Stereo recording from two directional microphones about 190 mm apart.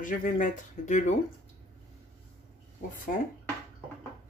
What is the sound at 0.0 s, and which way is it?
Speech, 45° left (ahead or behind).